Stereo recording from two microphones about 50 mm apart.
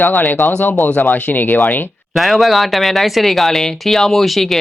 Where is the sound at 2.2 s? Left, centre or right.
Centre.